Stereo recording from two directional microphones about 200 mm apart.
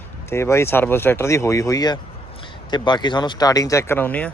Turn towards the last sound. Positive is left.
turn(degrees=10)  # may be behind; listen again after turning